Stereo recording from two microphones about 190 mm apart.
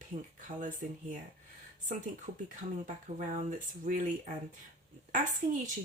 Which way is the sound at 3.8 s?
45° right (ahead or behind).